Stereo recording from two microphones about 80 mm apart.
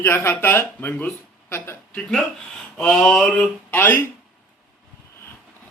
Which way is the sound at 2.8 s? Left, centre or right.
Centre.